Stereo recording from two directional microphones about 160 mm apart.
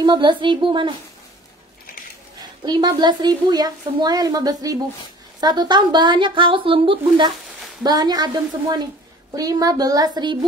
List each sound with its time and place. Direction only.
0.0 s a woman's voice: 30° right (ahead or behind)
2.6 s a woman's voice: 25° right (ahead or behind)